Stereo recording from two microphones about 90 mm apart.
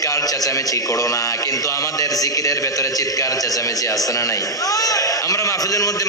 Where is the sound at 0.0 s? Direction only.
40° left (ahead or behind).